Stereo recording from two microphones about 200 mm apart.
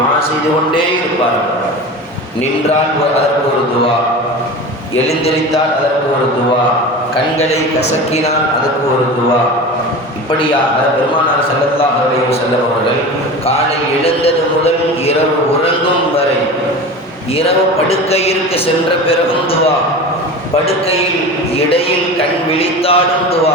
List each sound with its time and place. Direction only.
7.3 s a man's voice: 35° left (ahead or behind)
14.0 s a man's voice: 30° left (ahead or behind)
17.8 s a man's voice: 30° left (ahead or behind)
22.5 s a man's voice: 30° left (ahead or behind)